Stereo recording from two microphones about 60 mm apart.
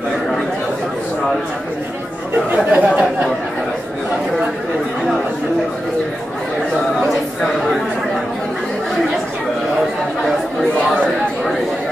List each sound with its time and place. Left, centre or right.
2.5 s speech: right
10.2 s chatter: centre